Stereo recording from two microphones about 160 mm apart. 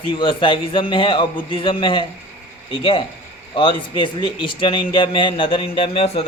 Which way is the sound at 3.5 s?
30° left (ahead or behind).